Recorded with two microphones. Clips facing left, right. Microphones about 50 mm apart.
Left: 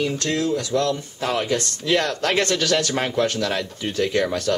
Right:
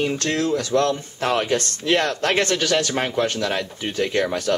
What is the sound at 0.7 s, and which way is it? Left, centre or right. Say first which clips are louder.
Speech: right 2 dB; right.